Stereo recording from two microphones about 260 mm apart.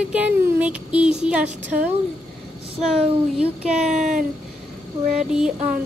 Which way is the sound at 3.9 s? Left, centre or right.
Right.